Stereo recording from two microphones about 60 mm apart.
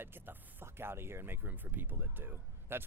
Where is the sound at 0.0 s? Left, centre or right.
Right.